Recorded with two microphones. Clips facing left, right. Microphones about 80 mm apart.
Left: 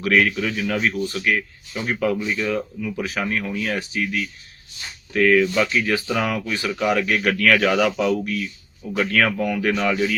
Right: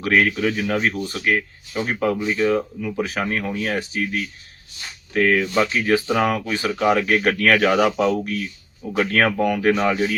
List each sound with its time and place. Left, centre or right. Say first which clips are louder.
0.0 s speech: right 1 dB; right